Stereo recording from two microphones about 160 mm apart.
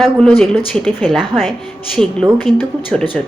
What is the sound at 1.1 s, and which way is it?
Speech, 25° right (ahead or behind).